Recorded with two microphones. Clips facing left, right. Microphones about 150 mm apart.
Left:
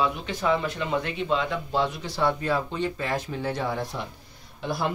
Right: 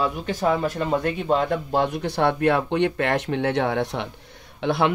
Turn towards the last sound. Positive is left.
turn(degrees=-75)  # may be behind; listen again after turning